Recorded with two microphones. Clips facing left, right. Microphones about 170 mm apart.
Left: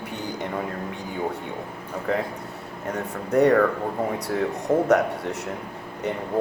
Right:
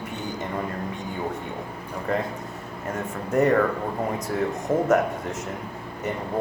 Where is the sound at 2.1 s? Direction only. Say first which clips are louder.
Left 1 dB; 85° left.